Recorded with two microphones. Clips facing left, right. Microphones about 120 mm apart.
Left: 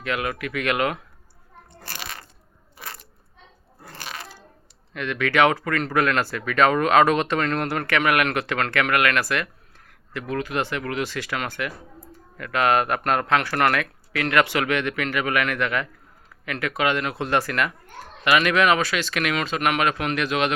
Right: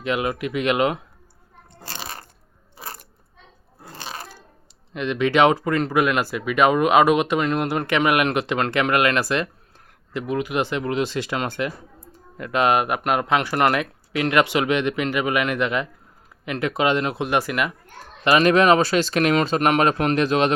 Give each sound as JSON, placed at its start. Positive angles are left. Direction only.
{"t": 0.0, "sound": "speech", "side_deg": -20}
{"t": 2.0, "sound": "coin", "side_deg": -35}
{"t": 2.7, "sound": "a sound", "side_deg": -30}
{"t": 3.8, "sound": "crunch", "side_deg": -25}
{"t": 4.9, "sound": "speech", "side_deg": -20}
{"t": 18.3, "sound": "speech", "side_deg": -35}